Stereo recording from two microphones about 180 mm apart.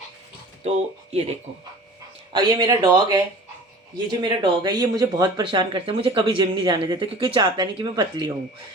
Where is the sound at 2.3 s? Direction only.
25° right (ahead or behind).